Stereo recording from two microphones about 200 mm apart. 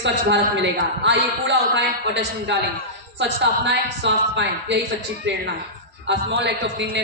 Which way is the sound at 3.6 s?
60° right (ahead or behind).